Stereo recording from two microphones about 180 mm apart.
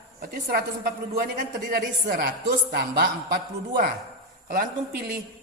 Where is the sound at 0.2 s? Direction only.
55° right (ahead or behind).